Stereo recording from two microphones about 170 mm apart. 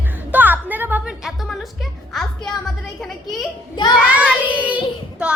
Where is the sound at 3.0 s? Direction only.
Centre (ahead or behind).